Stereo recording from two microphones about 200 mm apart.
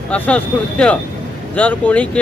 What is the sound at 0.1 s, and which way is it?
Speech, 5° left (ahead or behind).